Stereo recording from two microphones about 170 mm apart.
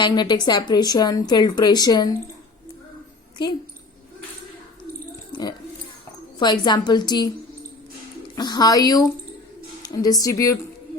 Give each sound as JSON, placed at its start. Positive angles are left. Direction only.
{"t": 0.0, "sound": "a woman's voice", "side_deg": 25}
{"t": 3.4, "sound": "a woman's voice", "side_deg": 25}
{"t": 5.3, "sound": "a sound", "side_deg": 25}
{"t": 6.4, "sound": "a woman's voice", "side_deg": 25}
{"t": 8.4, "sound": "a woman's voice", "side_deg": 25}